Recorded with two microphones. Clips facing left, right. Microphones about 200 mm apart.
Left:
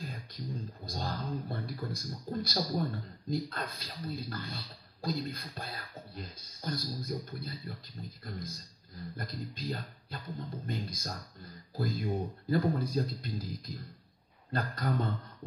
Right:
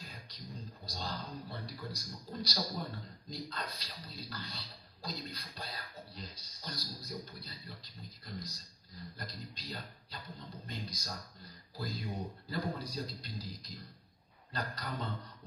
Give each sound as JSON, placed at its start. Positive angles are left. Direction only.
{"t": 0.1, "sound": "a man's voice", "side_deg": 50}